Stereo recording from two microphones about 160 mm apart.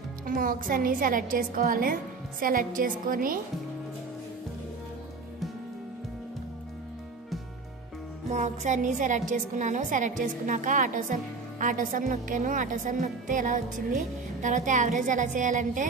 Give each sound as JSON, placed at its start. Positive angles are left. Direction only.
{"t": 0.3, "sound": "a woman's voice", "side_deg": -60}
{"t": 8.3, "sound": "a woman's voice", "side_deg": -50}